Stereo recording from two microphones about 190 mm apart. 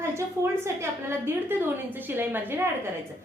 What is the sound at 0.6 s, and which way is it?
A woman's voice, 15° right (ahead or behind).